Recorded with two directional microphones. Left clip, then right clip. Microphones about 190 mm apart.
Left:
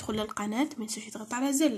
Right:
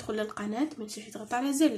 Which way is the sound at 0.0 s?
35° left (ahead or behind).